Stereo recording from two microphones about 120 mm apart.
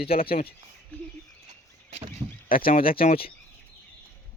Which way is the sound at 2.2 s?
30° right (ahead or behind).